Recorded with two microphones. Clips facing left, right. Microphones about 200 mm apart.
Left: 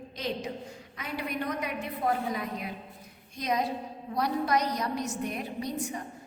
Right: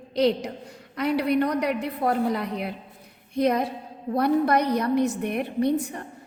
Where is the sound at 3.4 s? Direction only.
60° right (ahead or behind).